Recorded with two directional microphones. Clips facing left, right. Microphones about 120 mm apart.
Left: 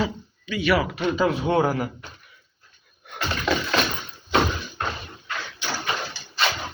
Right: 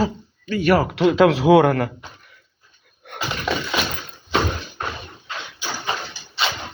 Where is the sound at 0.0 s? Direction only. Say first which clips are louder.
Right 4 dB; 45° right (ahead or behind).